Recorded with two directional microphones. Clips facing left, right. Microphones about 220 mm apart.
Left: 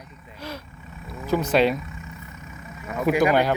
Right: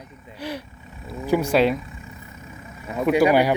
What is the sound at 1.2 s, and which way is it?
Speech, 10° right (ahead or behind).